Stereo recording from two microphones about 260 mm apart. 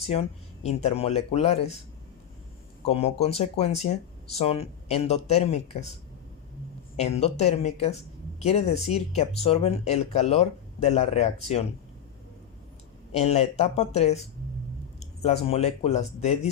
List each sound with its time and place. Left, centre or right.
0.1 s speech: left
2.8 s speech: left
6.9 s speech: left
13.1 s speech: left